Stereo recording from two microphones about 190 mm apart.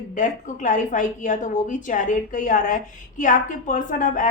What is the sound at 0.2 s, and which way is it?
A woman's voice, 40° left (ahead or behind).